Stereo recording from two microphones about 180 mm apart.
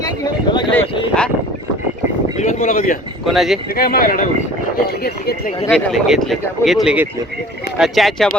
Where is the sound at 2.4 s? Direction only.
45° left (ahead or behind).